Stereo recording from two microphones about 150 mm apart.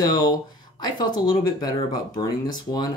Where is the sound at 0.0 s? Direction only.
30° left (ahead or behind).